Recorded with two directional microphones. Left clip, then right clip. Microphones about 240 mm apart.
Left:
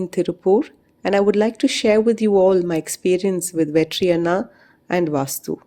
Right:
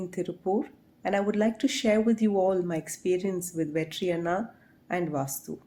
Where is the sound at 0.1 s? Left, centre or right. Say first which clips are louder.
Left 13 dB; left.